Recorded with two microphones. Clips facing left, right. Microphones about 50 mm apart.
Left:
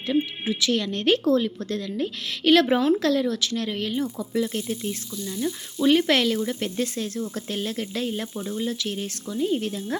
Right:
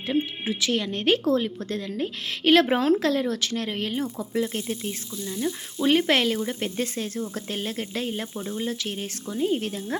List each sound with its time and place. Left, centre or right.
0.1 s speech: right
5.4 s speech: centre; by 9.8 s right